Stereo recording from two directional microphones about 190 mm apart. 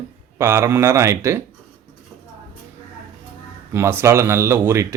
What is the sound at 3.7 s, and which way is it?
Speech, 10° right (ahead or behind).